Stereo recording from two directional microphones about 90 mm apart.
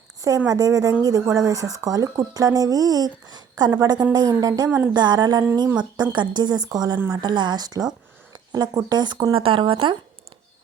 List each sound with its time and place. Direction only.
0.2 s speech: 40° right (ahead or behind)
4.9 s speech: 50° right (ahead or behind); by 9.9 s 75° right (ahead or behind)